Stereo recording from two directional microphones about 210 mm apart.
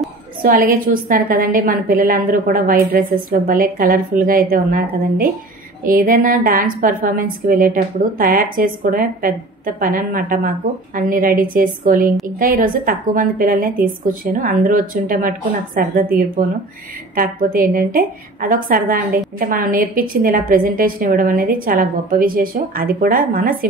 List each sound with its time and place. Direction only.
0.4 s a woman's voice: 40° right (ahead or behind)